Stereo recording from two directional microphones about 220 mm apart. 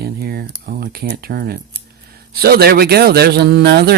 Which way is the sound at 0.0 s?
45° right (ahead or behind).